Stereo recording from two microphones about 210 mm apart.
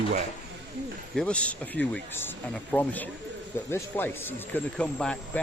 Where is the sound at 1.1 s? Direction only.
5° left (ahead or behind).